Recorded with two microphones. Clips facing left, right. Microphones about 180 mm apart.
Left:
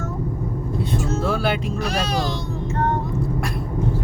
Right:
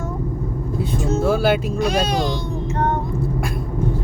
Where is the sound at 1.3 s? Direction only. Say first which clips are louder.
Right 6 dB; centre (ahead or behind).